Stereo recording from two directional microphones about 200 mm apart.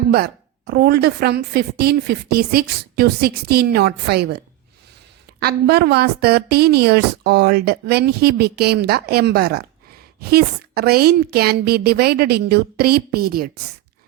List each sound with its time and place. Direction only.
0.1 s a woman's voice: 50° right (ahead or behind)
5.4 s a woman's voice: 50° right (ahead or behind)